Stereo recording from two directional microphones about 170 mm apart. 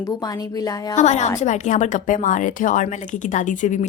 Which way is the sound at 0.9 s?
45° left (ahead or behind).